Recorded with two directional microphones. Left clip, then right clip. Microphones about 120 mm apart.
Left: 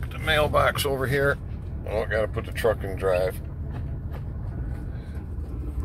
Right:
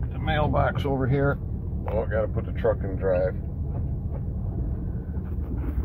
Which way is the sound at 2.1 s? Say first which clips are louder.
Left 1 dB; 45° left (ahead or behind).